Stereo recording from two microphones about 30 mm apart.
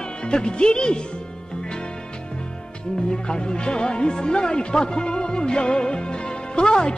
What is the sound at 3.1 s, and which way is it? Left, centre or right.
Speech, left.